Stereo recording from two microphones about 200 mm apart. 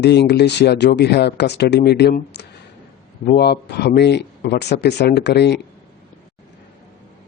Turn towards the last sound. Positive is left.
turn(degrees=60)  # may be behind; listen again after turning